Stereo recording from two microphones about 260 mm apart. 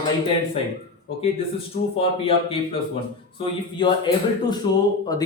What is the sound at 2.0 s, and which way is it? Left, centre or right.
Speech, left.